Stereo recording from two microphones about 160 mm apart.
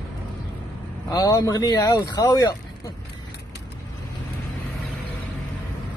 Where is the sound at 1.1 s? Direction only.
25° left (ahead or behind).